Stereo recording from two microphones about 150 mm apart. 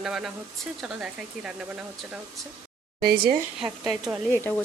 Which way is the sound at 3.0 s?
90° right.